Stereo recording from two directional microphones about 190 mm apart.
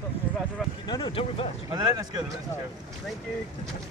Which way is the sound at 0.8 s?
25° left (ahead or behind).